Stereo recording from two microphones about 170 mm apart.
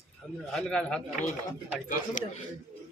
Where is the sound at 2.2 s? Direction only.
45° left (ahead or behind).